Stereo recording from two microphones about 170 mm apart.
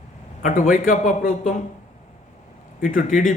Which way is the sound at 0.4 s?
45° left (ahead or behind).